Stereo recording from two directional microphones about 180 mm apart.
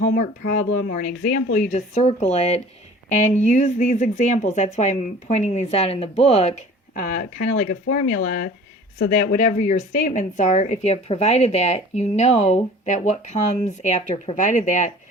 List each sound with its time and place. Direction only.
0.0 s speech: 50° left (ahead or behind)